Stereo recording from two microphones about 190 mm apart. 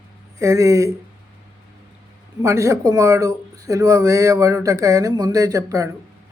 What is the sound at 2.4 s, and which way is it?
Speech, 15° right (ahead or behind).